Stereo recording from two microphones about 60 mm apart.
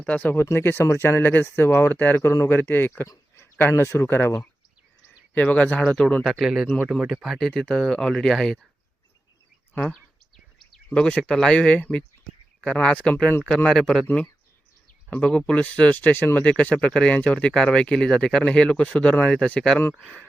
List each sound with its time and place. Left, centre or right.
0.0 s speech: left
0.3 s speech: left
2.2 s speech: left
2.6 s speech: left
3.3 s speech: left
5.3 s speech: left
6.4 s speech: centre
9.8 s a sound: centre
10.9 s speech: centre
15.1 s speech: centre